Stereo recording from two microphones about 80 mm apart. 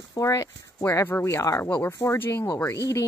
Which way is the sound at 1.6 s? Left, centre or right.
Left.